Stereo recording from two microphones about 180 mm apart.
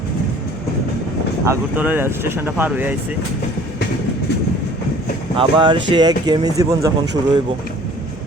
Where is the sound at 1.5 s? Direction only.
10° right (ahead or behind).